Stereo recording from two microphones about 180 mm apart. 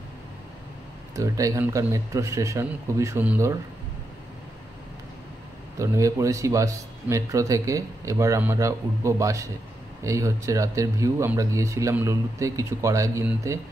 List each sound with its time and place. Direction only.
1.1 s a man's voice: 20° right (ahead or behind)
5.8 s a man's voice: 15° right (ahead or behind)